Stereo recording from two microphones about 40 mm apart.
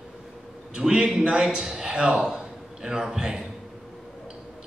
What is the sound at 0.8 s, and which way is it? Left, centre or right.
A man's voice, right.